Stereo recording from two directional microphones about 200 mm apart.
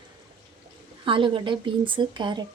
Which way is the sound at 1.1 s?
25° right (ahead or behind).